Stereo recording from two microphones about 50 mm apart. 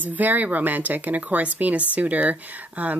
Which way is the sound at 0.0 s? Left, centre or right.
Right.